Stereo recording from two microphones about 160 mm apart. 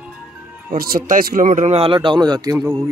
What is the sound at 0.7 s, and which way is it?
Speech, 65° right (ahead or behind).